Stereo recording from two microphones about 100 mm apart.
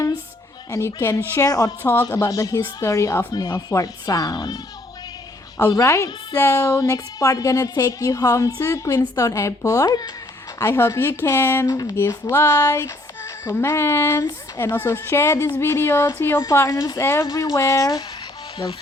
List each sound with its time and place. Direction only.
0.7 s a woman's voice: 30° left (ahead or behind)
1.5 s a woman's voice: 40° left (ahead or behind)
1.8 s a woman's voice: 20° left (ahead or behind)
2.1 s a woman's voice: 35° left (ahead or behind)
5.7 s a woman's voice: 30° left (ahead or behind)
10.6 s a woman's voice: 30° left (ahead or behind)
17.0 s a woman's voice: 25° left (ahead or behind)